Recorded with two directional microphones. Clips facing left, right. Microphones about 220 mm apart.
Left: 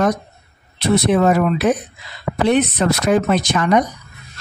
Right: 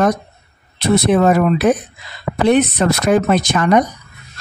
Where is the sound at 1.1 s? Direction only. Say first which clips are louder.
Right 2 dB; 50° right (ahead or behind).